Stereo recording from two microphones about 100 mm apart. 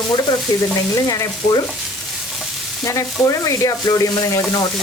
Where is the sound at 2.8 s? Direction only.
35° left (ahead or behind).